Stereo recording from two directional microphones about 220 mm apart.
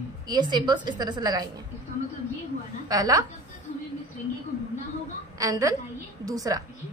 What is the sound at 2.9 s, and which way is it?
Speech, 15° right (ahead or behind).